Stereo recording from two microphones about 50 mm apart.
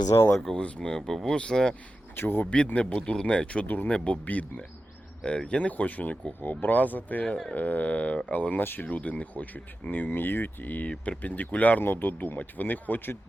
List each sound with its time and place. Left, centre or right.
0.1 s speech: left
0.5 s speech: centre
2.1 s speech: left
2.9 s speech: centre; by 10.8 s left
10.8 s speech: left
11.2 s speech: left
11.8 s speech: left